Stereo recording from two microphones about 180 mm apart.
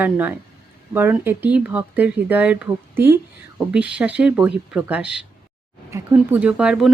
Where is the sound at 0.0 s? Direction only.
10° right (ahead or behind).